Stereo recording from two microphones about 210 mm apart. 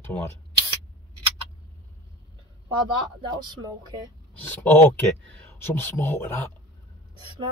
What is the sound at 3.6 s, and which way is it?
Speech, 20° right (ahead or behind).